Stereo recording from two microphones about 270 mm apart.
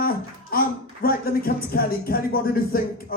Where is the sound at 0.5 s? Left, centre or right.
Left.